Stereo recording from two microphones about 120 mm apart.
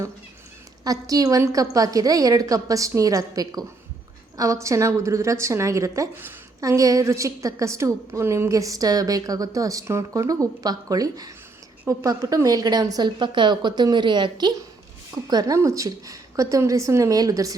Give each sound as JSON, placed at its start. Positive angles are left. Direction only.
{"t": 0.9, "sound": "a woman's voice", "side_deg": -30}